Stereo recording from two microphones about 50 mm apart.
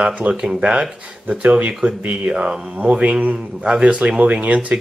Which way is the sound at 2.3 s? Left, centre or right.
Centre.